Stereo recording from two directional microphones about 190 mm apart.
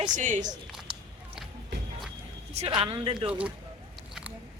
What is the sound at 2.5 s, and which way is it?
Speech, 30° right (ahead or behind).